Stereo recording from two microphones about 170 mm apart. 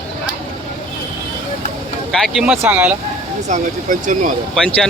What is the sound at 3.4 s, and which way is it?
Speech, 45° right (ahead or behind).